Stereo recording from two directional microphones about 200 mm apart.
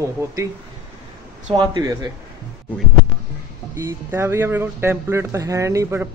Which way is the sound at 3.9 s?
10° right (ahead or behind).